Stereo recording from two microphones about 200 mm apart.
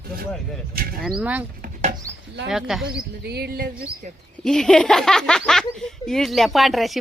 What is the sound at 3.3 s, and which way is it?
Speech, 55° right (ahead or behind).